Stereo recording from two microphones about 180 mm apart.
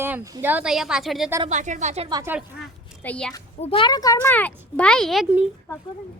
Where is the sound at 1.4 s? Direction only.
40° right (ahead or behind).